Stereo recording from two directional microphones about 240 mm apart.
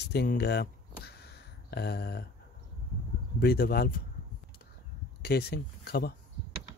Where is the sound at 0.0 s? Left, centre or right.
Left.